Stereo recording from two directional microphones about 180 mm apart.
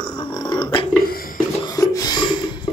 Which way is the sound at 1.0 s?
55° left (ahead or behind).